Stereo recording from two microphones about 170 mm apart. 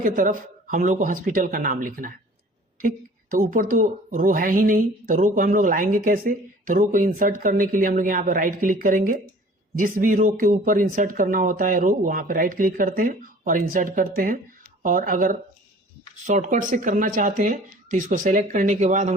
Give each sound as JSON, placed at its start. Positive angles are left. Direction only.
{"t": 0.0, "sound": "a woman's voice", "side_deg": -55}